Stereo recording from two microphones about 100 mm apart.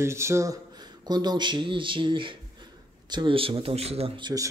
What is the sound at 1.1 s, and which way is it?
Speech, 45° right (ahead or behind).